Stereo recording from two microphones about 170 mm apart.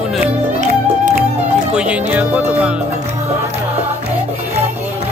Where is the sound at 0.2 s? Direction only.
50° right (ahead or behind).